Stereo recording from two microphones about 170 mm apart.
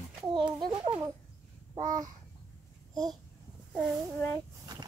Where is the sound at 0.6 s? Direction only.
30° right (ahead or behind).